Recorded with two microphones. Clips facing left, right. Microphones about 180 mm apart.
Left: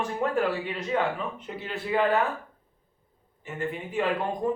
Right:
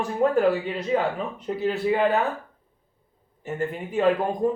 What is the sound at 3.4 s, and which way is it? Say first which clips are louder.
Speech: right 4 dB; 40° right (ahead or behind).